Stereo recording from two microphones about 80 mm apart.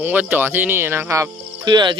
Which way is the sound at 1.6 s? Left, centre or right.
Right.